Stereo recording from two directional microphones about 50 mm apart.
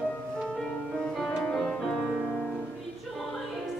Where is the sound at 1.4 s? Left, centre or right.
Centre.